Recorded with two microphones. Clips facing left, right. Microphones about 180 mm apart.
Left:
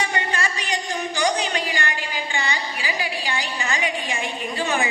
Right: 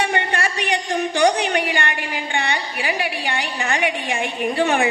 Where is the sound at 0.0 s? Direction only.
60° right (ahead or behind).